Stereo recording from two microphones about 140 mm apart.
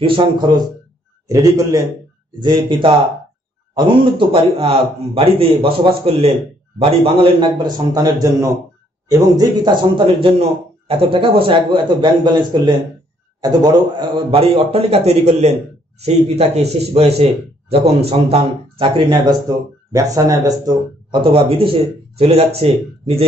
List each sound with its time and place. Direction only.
0.0 s a man's voice: 35° right (ahead or behind)
2.4 s a man's voice: 35° right (ahead or behind)
21.2 s speech: 40° right (ahead or behind)